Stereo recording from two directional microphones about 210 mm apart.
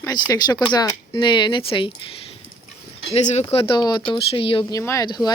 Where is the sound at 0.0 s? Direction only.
15° left (ahead or behind).